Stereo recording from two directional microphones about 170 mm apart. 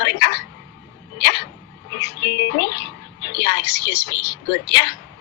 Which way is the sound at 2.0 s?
85° left.